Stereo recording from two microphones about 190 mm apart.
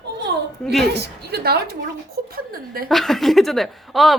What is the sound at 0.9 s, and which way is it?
A woman's voice, 60° right (ahead or behind).